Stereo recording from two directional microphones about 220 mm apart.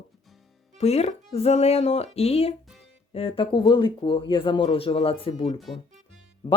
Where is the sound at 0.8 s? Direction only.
30° left (ahead or behind).